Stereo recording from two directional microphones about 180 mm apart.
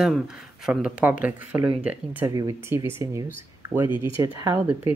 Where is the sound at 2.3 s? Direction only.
20° right (ahead or behind).